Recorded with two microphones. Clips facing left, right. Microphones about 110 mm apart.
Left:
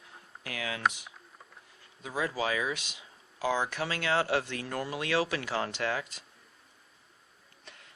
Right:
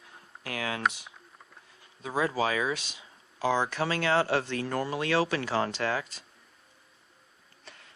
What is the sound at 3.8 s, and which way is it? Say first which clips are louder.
Speech: right 3 dB; 40° right (ahead or behind).